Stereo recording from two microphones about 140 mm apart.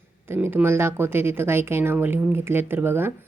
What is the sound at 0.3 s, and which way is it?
Speech, 15° right (ahead or behind).